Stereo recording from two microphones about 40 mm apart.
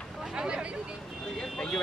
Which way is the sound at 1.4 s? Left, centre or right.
Centre.